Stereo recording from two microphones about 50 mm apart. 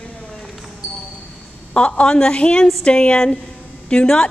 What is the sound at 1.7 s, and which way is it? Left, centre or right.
A woman's voice, left.